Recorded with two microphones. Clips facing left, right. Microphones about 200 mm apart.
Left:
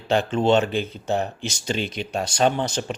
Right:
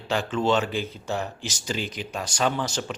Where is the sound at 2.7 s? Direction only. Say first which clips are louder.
Left 3 dB; 25° left (ahead or behind).